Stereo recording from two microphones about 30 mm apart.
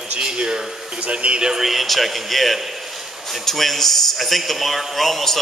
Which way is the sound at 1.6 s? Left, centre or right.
Centre.